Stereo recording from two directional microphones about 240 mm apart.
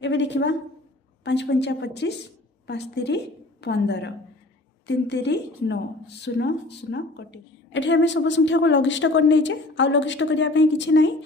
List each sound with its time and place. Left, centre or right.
0.0 s a woman's voice: left